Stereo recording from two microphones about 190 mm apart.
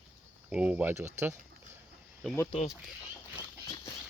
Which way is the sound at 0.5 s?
5° right (ahead or behind).